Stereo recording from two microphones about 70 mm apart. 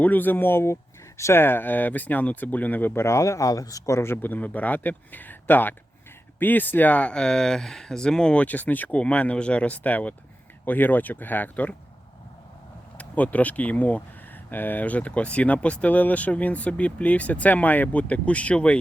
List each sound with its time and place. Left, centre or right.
0.0 s speech: left
3.0 s speech: left
13.0 s speech: left